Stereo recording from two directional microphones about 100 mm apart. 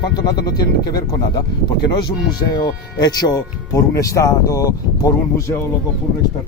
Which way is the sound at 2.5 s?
45° left (ahead or behind).